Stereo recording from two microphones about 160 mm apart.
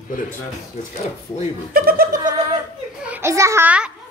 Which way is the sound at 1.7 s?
70° right (ahead or behind).